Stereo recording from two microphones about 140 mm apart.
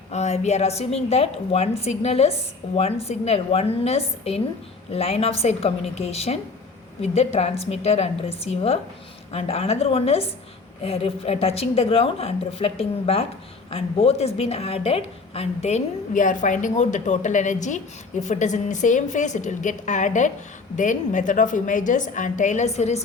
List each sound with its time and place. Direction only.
0.1 s a woman's voice: 55° left (ahead or behind)